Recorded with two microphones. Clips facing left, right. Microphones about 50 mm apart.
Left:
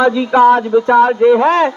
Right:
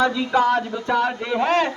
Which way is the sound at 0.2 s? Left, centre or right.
Left.